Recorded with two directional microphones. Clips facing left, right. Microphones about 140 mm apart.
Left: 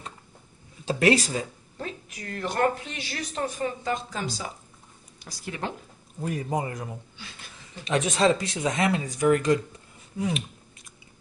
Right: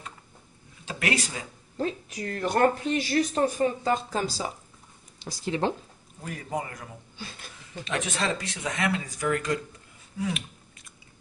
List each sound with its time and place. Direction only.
0.8 s speech: 30° left (ahead or behind)
1.8 s speech: 30° right (ahead or behind)
6.2 s speech: 25° left (ahead or behind)